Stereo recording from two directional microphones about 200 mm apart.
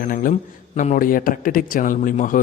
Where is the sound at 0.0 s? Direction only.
45° left (ahead or behind).